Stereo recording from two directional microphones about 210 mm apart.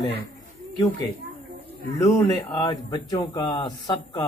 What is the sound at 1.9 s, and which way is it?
Speech, 15° left (ahead or behind).